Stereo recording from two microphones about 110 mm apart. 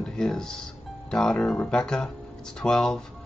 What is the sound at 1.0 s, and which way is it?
Speech, 5° left (ahead or behind).